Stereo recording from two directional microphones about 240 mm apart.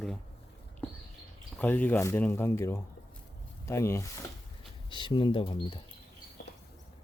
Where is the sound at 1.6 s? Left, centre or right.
Centre.